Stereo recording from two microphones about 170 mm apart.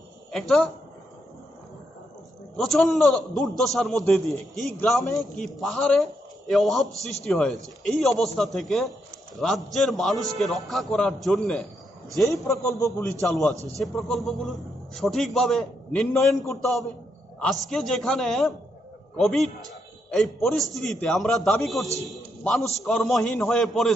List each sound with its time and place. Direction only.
0.3 s speech: centre (ahead or behind)
2.5 s a man's voice: centre (ahead or behind)
12.2 s a man's voice: 15° left (ahead or behind)
13.7 s a man's voice: centre (ahead or behind)